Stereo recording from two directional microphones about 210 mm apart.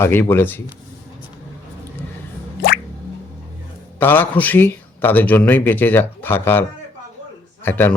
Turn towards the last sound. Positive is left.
turn(degrees=10)  # may be behind; listen again after turning